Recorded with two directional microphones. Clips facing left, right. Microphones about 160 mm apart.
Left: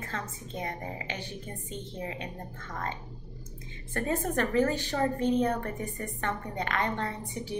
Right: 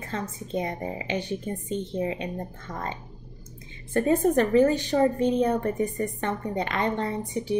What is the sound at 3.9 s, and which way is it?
A woman's voice, 20° right (ahead or behind).